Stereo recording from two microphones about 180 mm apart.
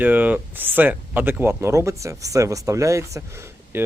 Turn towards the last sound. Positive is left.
turn(degrees=-15)  # may be behind; listen again after turning